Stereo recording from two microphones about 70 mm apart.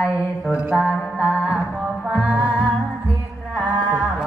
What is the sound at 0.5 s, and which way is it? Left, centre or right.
Mantra, centre.